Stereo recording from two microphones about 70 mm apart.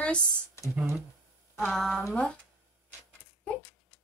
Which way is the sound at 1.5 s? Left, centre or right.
Centre.